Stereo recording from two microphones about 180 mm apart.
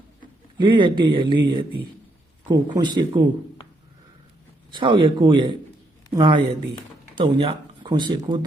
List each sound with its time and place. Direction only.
0.6 s speech: 25° right (ahead or behind)
4.7 s speech: 25° right (ahead or behind)